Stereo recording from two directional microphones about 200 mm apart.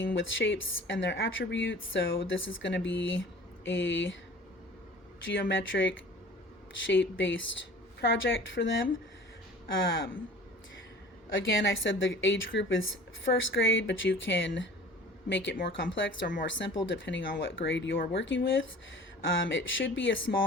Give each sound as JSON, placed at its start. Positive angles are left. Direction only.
{"t": 0.0, "sound": "speech", "side_deg": 70}
{"t": 5.2, "sound": "speech", "side_deg": 70}
{"t": 11.3, "sound": "speech", "side_deg": 65}